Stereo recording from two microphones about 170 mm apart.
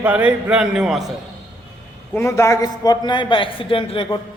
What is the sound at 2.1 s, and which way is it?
A man's voice, 15° left (ahead or behind).